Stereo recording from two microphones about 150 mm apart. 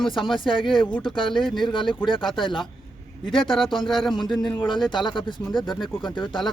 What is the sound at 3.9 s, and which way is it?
Speech, centre (ahead or behind).